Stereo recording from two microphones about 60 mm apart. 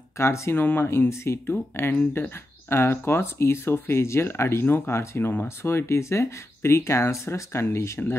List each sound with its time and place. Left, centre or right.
0.2 s speech: left
1.5 s speech: left